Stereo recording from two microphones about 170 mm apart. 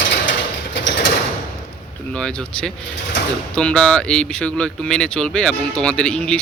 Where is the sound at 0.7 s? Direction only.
90° left.